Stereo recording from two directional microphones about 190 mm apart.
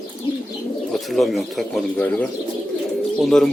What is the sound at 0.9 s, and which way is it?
Speech, centre (ahead or behind).